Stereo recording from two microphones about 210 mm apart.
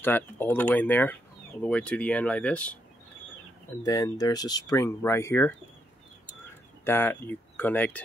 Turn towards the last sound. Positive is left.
turn(degrees=10)  # may be behind; listen again after turning